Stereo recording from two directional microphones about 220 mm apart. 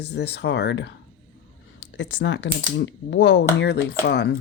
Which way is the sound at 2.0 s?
55° left (ahead or behind).